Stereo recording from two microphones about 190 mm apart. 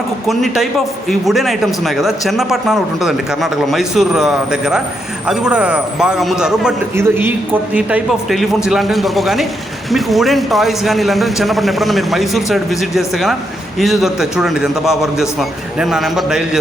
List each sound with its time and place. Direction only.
0.3 s a man's voice: centre (ahead or behind)